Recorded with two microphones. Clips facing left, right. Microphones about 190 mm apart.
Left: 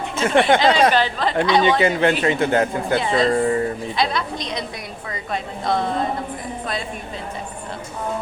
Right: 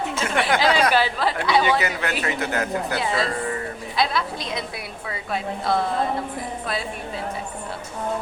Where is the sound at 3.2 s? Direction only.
30° left (ahead or behind).